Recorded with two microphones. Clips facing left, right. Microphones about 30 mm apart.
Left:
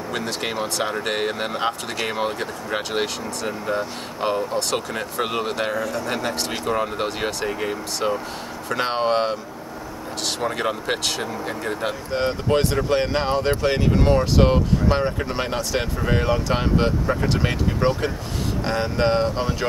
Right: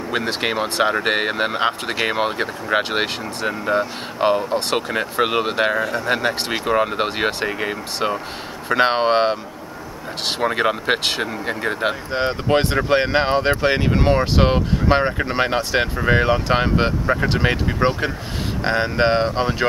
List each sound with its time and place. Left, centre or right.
0.1 s speech: right